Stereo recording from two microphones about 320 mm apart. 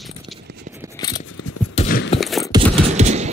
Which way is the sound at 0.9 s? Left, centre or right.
Centre.